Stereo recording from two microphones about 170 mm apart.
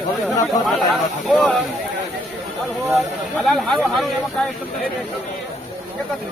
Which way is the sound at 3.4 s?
Centre (ahead or behind).